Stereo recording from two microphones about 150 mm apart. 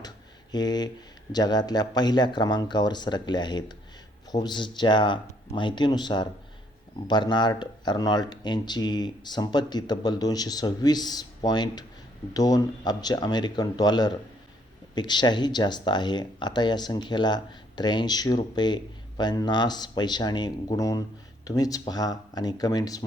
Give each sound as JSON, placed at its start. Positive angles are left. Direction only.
{"t": 0.5, "sound": "speech", "side_deg": 25}